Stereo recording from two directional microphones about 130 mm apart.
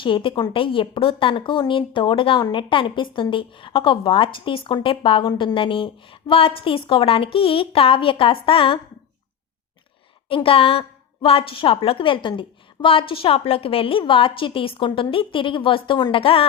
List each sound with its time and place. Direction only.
0.0 s a woman's voice: 40° left (ahead or behind)
10.2 s a woman's voice: 45° left (ahead or behind)